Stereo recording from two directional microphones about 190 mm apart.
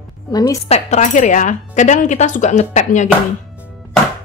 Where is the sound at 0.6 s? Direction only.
35° left (ahead or behind).